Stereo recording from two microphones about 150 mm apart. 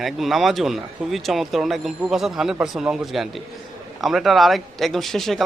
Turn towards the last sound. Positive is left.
turn(degrees=0)  # may be behind; listen again after turning